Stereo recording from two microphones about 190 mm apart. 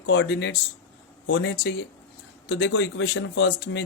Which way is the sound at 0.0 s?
80° left.